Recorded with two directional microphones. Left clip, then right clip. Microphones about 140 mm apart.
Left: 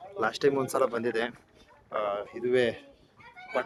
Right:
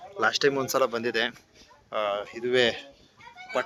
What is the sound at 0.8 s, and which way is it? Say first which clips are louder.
Speech: right 2 dB; centre (ahead or behind).